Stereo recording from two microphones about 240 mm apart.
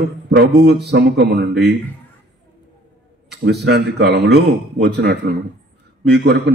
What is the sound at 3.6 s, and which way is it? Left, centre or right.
Speech, right.